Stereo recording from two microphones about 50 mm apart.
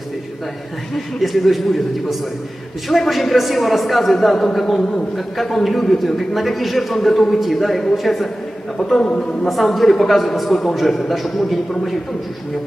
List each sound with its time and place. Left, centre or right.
0.9 s a man's voice: centre
9.5 s a man's voice: centre